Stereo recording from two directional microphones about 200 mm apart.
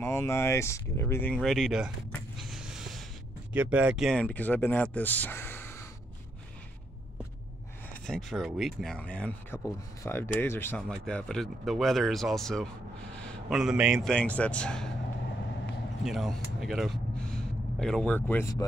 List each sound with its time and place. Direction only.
0.0 s speech: 10° left (ahead or behind)
1.3 s a sound: centre (ahead or behind)
3.5 s speech: 5° right (ahead or behind); by 5.9 s 10° left (ahead or behind)
7.9 s speech: centre (ahead or behind)
16.0 s speech: centre (ahead or behind)
16.5 s a sound: centre (ahead or behind)
18.3 s speech: 15° left (ahead or behind)